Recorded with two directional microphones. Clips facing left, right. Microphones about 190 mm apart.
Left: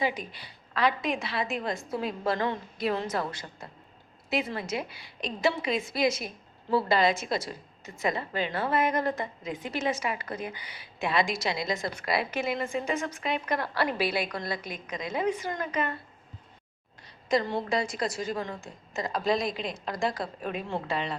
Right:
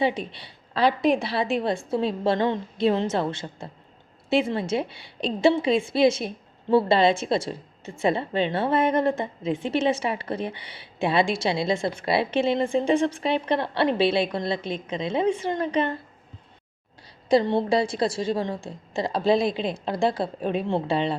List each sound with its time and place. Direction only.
0.0 s a woman's voice: 30° right (ahead or behind)
17.2 s a woman's voice: 30° right (ahead or behind)